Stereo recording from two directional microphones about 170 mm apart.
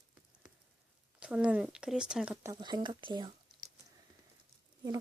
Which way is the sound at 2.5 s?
25° right (ahead or behind).